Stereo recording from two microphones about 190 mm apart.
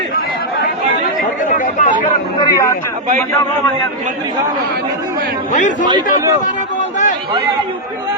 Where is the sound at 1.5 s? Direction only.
45° left (ahead or behind).